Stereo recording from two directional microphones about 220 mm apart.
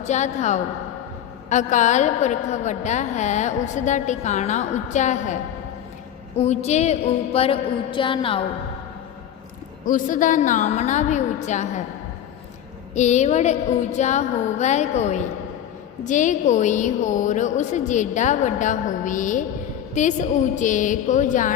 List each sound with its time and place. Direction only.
0.0 s a woman's voice: 30° left (ahead or behind)
6.4 s a woman's voice: 30° left (ahead or behind)
9.8 s a woman's voice: 35° left (ahead or behind)
12.9 s a woman's voice: 30° left (ahead or behind)